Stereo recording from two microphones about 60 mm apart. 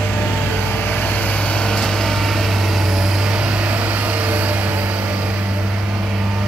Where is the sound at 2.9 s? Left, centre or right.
Centre.